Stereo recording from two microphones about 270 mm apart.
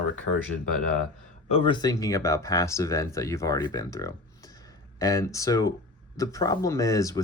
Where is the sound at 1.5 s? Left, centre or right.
Centre.